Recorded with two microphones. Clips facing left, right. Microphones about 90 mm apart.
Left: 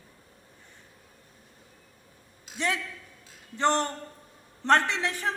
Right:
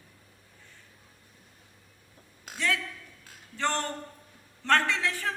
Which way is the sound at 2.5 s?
55° right (ahead or behind).